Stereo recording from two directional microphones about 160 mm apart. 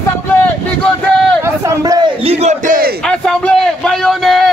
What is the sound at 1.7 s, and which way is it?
Speech, 25° right (ahead or behind).